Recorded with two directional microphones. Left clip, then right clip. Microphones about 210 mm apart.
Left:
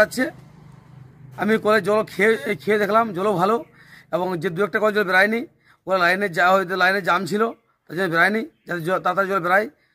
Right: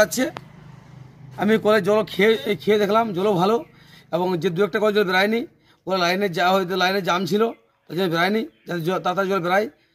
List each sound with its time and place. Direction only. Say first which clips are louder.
0.0 s speech: even; 5° left (ahead or behind)
1.3 s speech: even; 5° left (ahead or behind)